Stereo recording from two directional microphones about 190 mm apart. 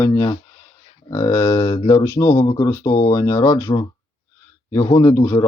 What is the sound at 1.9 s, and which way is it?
Speech, 15° left (ahead or behind).